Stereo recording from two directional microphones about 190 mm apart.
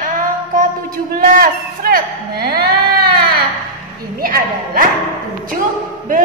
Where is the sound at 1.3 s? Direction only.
50° right (ahead or behind).